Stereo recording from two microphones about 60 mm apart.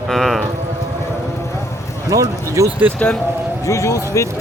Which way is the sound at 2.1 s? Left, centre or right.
Right.